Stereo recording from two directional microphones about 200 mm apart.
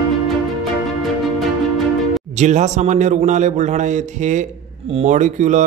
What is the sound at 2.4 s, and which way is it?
A man's voice, 35° right (ahead or behind).